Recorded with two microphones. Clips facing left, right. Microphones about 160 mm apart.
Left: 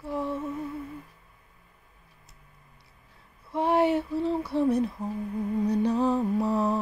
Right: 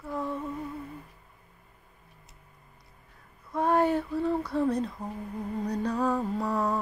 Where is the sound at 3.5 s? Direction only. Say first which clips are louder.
Left 1 dB; 25° left (ahead or behind).